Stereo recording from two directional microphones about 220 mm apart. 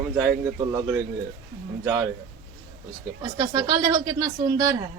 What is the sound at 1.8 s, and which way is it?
Speech, 10° right (ahead or behind).